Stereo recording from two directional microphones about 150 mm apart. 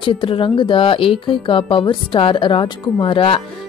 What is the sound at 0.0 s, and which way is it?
Speech, 35° left (ahead or behind).